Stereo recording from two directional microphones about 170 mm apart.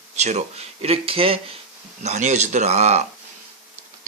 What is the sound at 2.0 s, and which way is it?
Speech, 45° right (ahead or behind).